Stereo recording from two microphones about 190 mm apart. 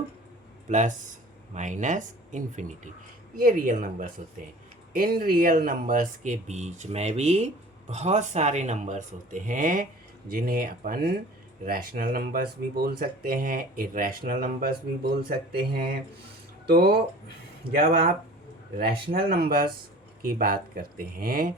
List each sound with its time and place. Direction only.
0.7 s speech: 40° right (ahead or behind); by 17.0 s 55° right (ahead or behind)
19.3 s speech: 50° right (ahead or behind)